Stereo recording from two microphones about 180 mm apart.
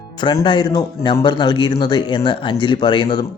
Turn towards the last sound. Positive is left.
turn(degrees=25)  # may be behind; listen again after turning